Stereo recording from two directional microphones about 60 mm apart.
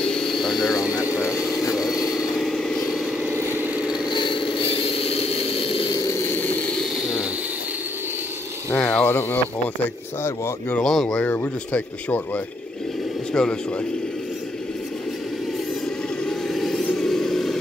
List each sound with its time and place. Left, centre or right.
0.1 s vehicle: centre
1.1 s vehicle: left
1.8 s a sound: centre
2.4 s vehicle: centre
3.3 s vehicle: right
7.0 s a sound: centre
8.7 s a sound: centre
9.0 s speech: left
10.8 s speech: centre
11.1 s speech: left
13.3 s speech: centre
16.3 s vehicle: centre